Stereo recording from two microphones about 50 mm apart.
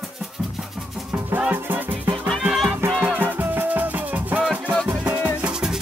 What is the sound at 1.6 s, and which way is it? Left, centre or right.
Music, right.